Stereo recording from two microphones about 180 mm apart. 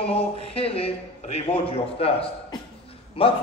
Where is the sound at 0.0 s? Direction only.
35° left (ahead or behind).